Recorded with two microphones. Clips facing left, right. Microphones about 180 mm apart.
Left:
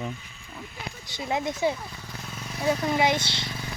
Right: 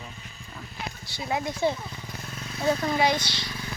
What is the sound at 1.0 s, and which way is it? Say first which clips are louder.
Speech: left 1 dB; 20° left (ahead or behind).